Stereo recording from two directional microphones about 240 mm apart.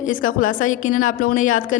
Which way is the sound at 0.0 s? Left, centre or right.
Left.